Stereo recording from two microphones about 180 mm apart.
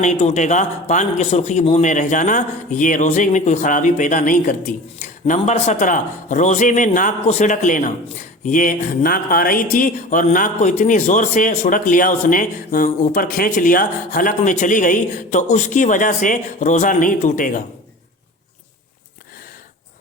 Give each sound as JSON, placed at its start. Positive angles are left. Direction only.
{"t": 0.0, "sound": "speech", "side_deg": 40}